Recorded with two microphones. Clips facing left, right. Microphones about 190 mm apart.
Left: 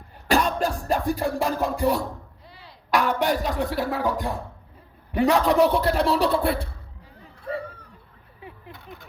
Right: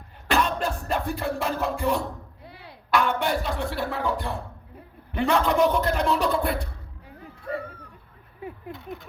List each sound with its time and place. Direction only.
0.3 s music: 40° left (ahead or behind)
2.4 s a sound: 60° right (ahead or behind)
2.9 s speech: 40° left (ahead or behind)